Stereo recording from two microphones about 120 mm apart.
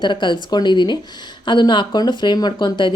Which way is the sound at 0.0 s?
40° left (ahead or behind).